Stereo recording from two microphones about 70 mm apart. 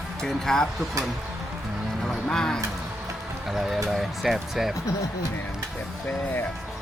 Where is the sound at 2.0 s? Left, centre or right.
Centre.